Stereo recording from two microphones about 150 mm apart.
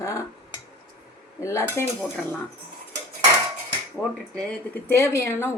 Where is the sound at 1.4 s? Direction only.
20° left (ahead or behind).